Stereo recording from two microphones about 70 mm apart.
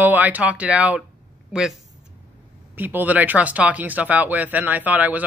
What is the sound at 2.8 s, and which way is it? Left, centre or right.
A man's voice, right.